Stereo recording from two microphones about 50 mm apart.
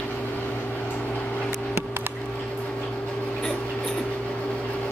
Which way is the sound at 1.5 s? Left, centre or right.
Right.